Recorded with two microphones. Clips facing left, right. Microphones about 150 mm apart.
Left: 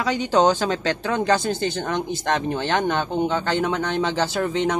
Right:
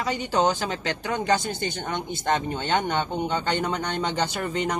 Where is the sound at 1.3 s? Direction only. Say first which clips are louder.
Left 2 dB; 20° right (ahead or behind).